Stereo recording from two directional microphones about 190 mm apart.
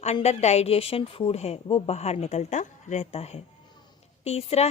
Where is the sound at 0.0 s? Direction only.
35° left (ahead or behind).